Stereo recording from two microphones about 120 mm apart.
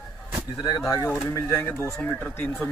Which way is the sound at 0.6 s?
30° left (ahead or behind).